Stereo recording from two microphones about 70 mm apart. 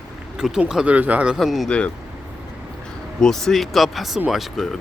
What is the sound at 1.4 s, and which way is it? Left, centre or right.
Speech, centre.